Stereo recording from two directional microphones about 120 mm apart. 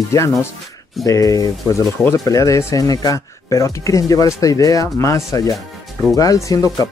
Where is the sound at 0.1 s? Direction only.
25° left (ahead or behind).